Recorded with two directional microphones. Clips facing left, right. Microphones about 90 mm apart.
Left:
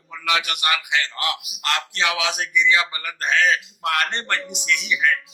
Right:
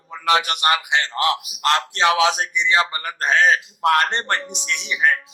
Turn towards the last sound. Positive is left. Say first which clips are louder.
# right 1 dB
turn(degrees=-35)  # may be behind; listen again after turning